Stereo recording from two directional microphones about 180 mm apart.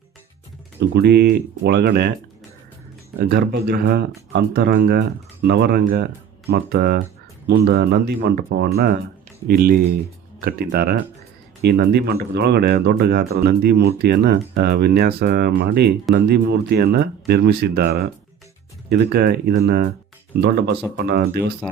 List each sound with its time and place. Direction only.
0.9 s speech: 65° right (ahead or behind)
3.2 s speech: 65° right (ahead or behind)